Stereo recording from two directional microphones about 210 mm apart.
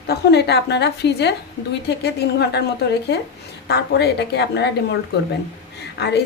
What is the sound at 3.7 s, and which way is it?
A woman's voice, 50° left (ahead or behind).